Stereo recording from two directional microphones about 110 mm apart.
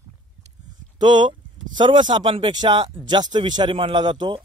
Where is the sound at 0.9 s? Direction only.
40° right (ahead or behind).